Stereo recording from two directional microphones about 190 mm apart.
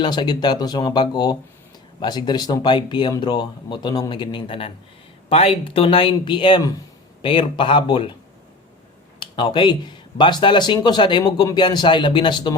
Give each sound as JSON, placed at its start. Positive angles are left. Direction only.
{"t": 0.0, "sound": "speech", "side_deg": 25}
{"t": 9.3, "sound": "speech", "side_deg": 25}